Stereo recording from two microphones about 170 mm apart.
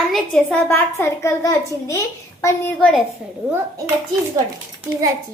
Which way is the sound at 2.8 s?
Centre (ahead or behind).